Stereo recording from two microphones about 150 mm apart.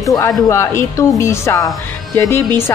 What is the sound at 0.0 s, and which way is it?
A woman's voice, 20° left (ahead or behind).